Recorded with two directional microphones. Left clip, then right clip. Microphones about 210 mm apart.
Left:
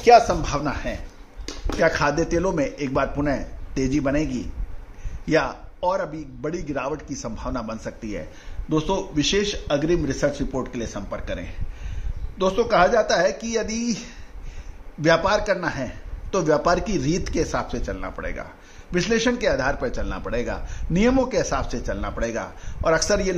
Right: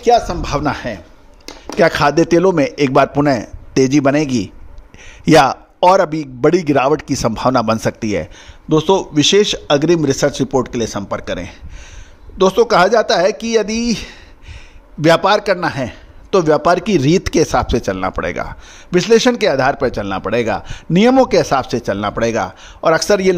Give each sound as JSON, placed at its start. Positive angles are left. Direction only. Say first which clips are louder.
{"t": 0.0, "sound": "a man's voice", "louder": "right 1 dB", "side_deg": -40}